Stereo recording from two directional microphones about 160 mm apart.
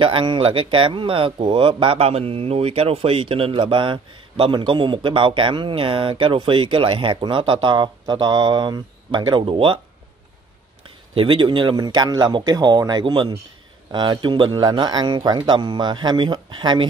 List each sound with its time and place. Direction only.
0.0 s speech: 30° right (ahead or behind)
11.1 s speech: 30° right (ahead or behind)